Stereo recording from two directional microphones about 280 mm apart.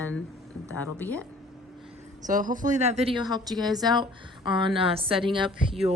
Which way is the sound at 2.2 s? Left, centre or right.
Right.